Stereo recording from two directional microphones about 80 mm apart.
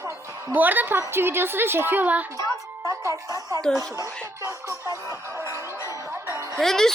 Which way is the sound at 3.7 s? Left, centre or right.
Centre.